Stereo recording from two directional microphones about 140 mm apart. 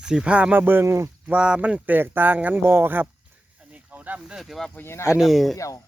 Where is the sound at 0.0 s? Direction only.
5° right (ahead or behind).